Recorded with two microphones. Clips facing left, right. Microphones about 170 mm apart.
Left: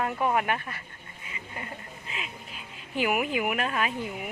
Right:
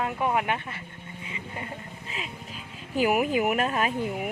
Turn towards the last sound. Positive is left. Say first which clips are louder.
# right 3 dB
turn(degrees=-40)  # may be behind; listen again after turning